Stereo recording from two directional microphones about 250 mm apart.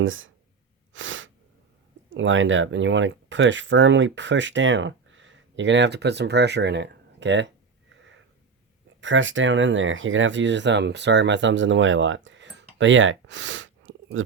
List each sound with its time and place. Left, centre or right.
0.0 s speech: right
0.9 s sneeze: right
2.0 s speech: right
9.0 s speech: right